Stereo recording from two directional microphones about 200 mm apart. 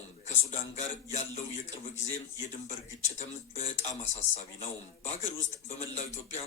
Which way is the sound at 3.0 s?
35° left (ahead or behind).